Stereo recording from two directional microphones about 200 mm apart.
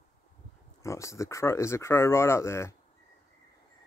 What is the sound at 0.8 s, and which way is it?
Speech, 15° left (ahead or behind).